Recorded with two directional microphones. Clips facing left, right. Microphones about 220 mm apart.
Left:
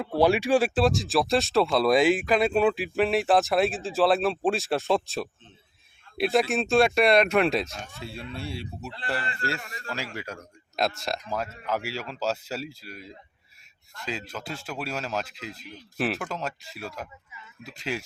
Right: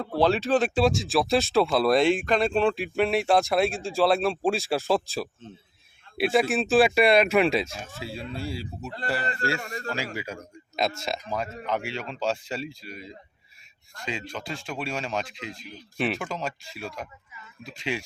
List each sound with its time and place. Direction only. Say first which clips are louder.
0.2 s speech: left 1 dB; 10° left (ahead or behind)
9.6 s speech: right 7 dB; 40° right (ahead or behind)
10.2 s speech: right 2 dB; centre (ahead or behind)